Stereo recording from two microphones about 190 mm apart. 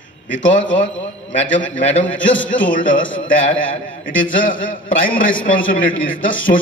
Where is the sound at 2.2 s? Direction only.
80° left.